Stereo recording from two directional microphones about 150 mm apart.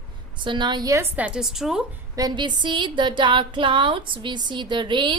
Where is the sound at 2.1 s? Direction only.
30° right (ahead or behind).